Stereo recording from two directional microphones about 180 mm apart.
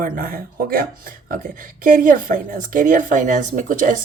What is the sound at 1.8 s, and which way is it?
Speech, 45° right (ahead or behind).